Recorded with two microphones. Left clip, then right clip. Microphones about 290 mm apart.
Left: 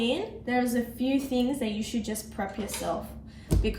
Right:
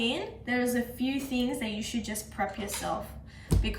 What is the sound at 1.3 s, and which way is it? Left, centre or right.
Speech, centre.